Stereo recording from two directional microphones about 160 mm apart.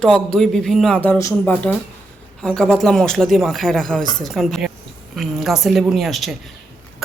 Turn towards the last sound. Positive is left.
turn(degrees=0)  # may be behind; listen again after turning